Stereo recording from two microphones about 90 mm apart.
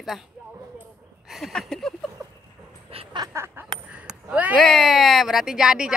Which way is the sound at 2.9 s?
90° right.